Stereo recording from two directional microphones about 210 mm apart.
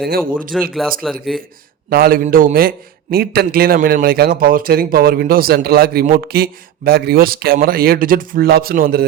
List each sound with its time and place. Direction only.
0.5 s speech: centre (ahead or behind)
1.9 s a man's voice: 45° right (ahead or behind)